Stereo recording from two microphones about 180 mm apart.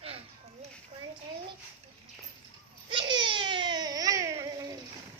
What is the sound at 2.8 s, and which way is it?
Baby cry, 25° right (ahead or behind).